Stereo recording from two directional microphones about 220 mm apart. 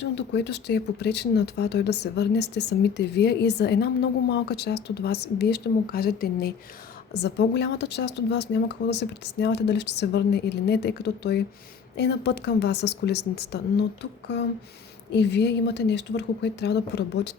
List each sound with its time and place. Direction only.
0.0 s speech: 50° left (ahead or behind)